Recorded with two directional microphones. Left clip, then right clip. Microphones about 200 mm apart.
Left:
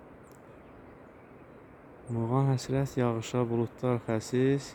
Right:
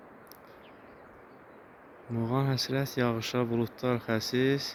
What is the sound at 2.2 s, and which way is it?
Speech, 15° left (ahead or behind).